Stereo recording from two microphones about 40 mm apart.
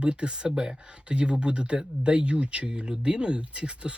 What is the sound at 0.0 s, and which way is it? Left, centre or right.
Speech, right.